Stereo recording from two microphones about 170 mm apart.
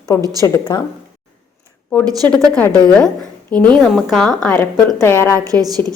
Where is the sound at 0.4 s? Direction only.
25° left (ahead or behind).